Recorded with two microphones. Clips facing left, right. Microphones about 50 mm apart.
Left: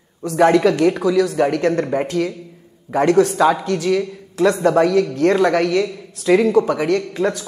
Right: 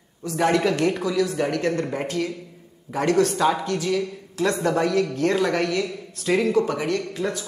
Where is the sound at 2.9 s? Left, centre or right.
Left.